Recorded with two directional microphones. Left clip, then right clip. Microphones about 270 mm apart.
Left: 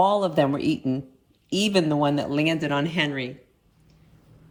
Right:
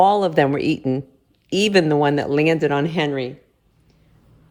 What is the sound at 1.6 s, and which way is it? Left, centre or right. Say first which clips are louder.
Speech: right 6 dB; right.